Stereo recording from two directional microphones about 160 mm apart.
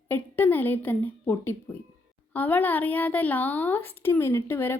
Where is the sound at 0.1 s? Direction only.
10° left (ahead or behind).